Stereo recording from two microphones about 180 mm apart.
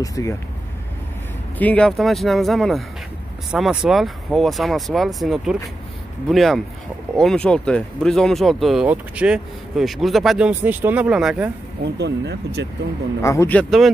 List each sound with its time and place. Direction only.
0.0 s speech: 20° left (ahead or behind)
1.6 s speech: 5° left (ahead or behind)
12.0 s speech: 70° right (ahead or behind)
13.2 s speech: 15° left (ahead or behind); by 13.9 s centre (ahead or behind)